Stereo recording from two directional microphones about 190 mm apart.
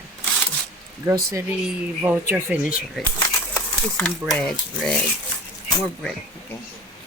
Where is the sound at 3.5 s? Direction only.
5° left (ahead or behind).